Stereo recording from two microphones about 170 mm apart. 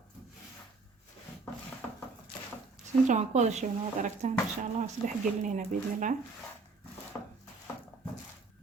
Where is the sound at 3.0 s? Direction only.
45° right (ahead or behind).